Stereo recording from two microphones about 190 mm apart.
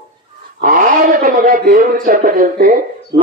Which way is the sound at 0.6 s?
45° right (ahead or behind).